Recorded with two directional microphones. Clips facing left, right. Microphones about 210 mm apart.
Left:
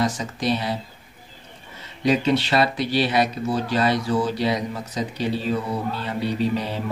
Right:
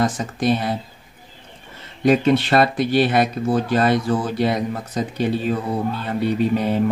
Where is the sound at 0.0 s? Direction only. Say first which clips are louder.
Right 3 dB; 50° right (ahead or behind).